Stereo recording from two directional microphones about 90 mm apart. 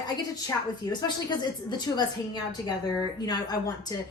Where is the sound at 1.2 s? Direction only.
55° left (ahead or behind).